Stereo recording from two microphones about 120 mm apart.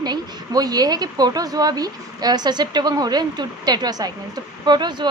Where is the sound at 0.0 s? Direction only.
35° right (ahead or behind).